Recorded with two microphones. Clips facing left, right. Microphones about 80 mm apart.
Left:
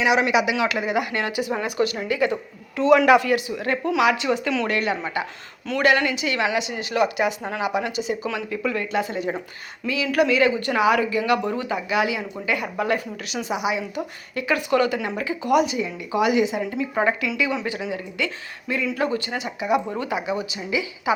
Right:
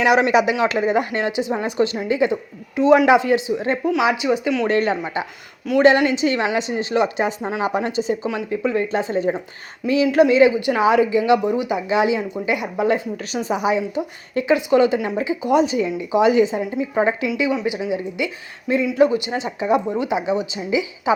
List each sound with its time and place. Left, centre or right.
0.0 s speech: right
1.2 s speech: right
4.6 s speech: right; by 11.8 s centre
11.9 s speech: right
13.3 s speech: right
13.9 s speech: right
19.3 s speech: right